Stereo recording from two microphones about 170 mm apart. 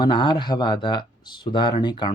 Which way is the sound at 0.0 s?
25° left (ahead or behind).